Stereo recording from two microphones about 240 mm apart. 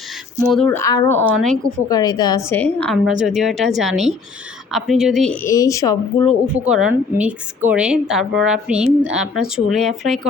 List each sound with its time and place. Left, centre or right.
0.4 s speech: centre
1.9 s a woman's voice: centre
6.7 s a woman's voice: centre